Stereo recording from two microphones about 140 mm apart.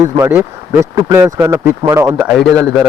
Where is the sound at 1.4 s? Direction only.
20° right (ahead or behind).